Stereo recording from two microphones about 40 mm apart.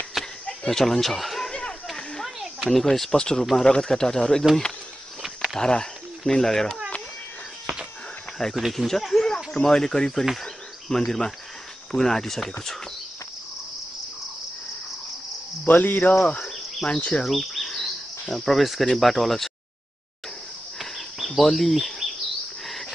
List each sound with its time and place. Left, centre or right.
0.2 s a sound: centre
0.7 s speech: centre
1.5 s a sound: centre
2.6 s speech: centre
5.6 s speech: centre
8.5 s speech: centre
9.3 s speech: centre
15.6 s speech: left
16.8 s speech: left
17.2 s insect: centre
18.9 s speech: centre
20.8 s a sound: centre
22.7 s dog: centre